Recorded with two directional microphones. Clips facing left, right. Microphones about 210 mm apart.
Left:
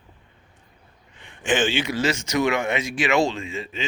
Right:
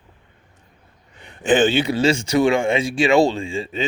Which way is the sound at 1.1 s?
40° right (ahead or behind).